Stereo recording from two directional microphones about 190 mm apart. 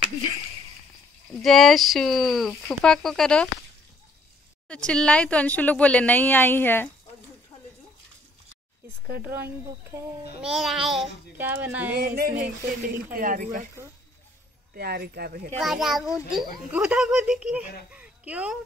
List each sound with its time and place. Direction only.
1.4 s speech: centre (ahead or behind)
4.6 s speech: 5° left (ahead or behind)
9.2 s a sound: 10° right (ahead or behind)
10.4 s speech: centre (ahead or behind)
11.3 s a sound: 10° right (ahead or behind)
12.2 s speech: 50° right (ahead or behind)
14.7 s speech: 55° right (ahead or behind)
15.6 s speech: centre (ahead or behind)